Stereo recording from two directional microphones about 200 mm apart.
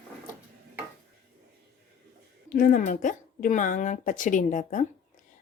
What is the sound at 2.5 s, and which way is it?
A woman's voice, 45° left (ahead or behind).